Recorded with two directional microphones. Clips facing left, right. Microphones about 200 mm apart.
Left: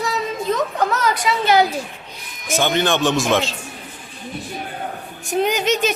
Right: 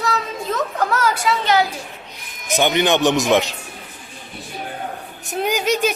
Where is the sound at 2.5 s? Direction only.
15° right (ahead or behind).